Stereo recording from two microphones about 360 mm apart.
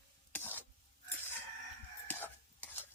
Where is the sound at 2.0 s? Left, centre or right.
Centre.